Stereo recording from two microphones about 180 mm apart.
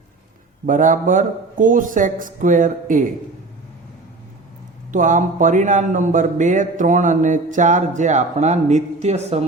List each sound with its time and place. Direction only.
0.6 s speech: 45° right (ahead or behind)
4.9 s speech: 45° right (ahead or behind)